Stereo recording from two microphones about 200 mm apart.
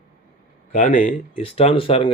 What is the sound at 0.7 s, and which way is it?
Speech, 45° left (ahead or behind).